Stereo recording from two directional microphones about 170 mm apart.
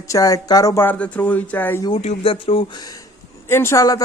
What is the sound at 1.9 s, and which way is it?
Speech, 35° left (ahead or behind).